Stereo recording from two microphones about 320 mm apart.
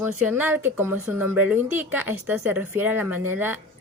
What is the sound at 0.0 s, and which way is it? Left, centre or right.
Speech, centre.